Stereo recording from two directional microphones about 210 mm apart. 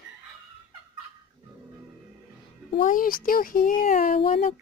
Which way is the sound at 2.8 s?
40° left (ahead or behind).